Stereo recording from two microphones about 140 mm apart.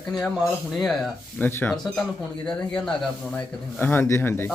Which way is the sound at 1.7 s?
5° left (ahead or behind).